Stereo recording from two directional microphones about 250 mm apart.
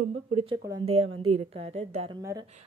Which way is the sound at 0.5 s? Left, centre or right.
Centre.